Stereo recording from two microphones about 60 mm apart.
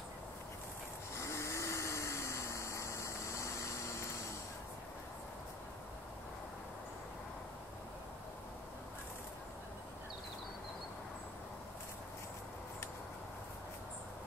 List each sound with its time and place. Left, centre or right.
1.1 s vehicle: left